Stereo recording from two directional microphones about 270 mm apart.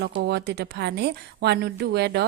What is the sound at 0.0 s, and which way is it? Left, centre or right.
Speech, right.